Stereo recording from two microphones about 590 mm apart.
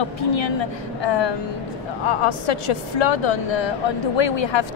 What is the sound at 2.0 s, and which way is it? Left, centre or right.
A woman's voice, left.